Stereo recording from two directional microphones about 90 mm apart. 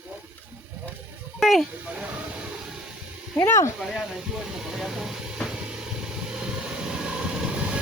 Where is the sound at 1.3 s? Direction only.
Centre (ahead or behind).